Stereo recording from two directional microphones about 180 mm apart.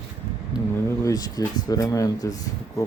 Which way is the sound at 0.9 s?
20° left (ahead or behind).